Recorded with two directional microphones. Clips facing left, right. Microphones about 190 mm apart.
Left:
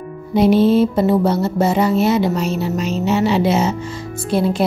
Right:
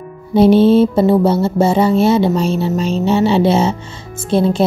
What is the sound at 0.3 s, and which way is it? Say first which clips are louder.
Music: right 4 dB; 30° right (ahead or behind).